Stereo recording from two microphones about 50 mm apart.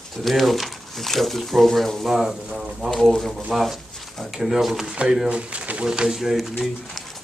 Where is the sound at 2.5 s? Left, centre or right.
Right.